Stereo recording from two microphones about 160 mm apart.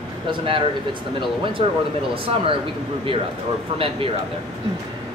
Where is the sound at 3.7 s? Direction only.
35° right (ahead or behind).